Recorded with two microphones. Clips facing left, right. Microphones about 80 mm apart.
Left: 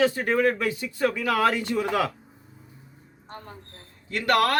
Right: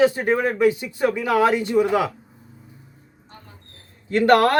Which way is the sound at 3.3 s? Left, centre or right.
Left.